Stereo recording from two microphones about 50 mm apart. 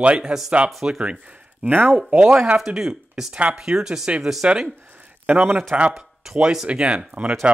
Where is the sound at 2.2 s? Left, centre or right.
Right.